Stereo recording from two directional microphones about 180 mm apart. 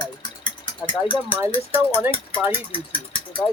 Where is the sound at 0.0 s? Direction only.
25° left (ahead or behind).